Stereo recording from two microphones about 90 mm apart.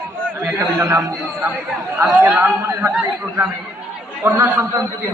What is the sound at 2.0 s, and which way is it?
Speech, 20° right (ahead or behind).